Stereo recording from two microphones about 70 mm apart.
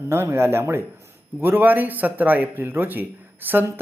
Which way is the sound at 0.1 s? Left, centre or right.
Right.